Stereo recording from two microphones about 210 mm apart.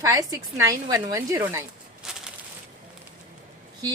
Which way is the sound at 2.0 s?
Centre (ahead or behind).